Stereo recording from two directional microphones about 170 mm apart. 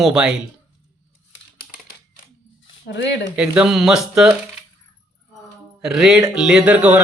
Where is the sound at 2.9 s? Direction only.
90° left.